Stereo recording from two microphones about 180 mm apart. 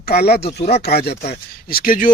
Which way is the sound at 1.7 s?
50° left (ahead or behind).